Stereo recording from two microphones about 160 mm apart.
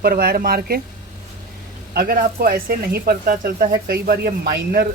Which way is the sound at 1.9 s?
65° right (ahead or behind).